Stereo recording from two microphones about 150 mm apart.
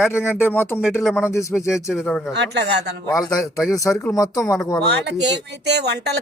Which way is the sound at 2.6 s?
90° right.